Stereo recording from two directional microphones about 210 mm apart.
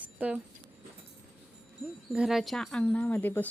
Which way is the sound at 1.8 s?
5° right (ahead or behind).